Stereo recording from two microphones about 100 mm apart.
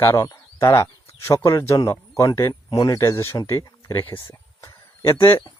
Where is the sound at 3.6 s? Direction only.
35° left (ahead or behind).